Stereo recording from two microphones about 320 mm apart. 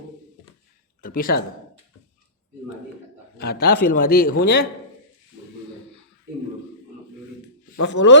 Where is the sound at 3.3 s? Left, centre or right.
Left.